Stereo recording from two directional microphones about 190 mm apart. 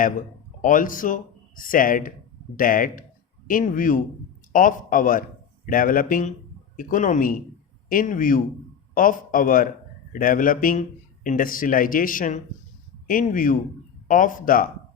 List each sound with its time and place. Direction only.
0.6 s speech: 45° left (ahead or behind)